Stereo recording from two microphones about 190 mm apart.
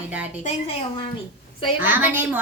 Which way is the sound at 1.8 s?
10° right (ahead or behind).